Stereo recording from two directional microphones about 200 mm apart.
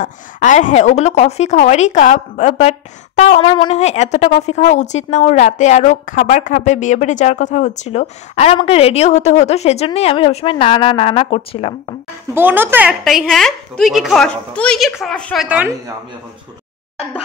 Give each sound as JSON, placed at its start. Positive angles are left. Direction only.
{"t": 0.0, "sound": "speech", "side_deg": 35}
{"t": 3.4, "sound": "speech", "side_deg": 25}
{"t": 12.4, "sound": "a woman's voice", "side_deg": -10}